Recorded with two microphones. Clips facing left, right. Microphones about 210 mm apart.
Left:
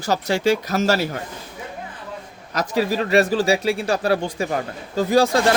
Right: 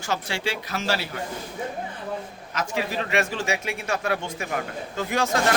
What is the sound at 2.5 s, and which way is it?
A man's voice, 40° left (ahead or behind).